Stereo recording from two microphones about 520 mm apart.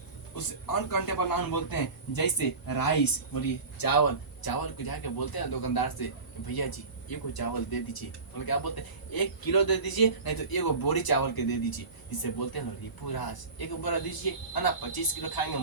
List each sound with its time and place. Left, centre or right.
0.3 s a man's voice: left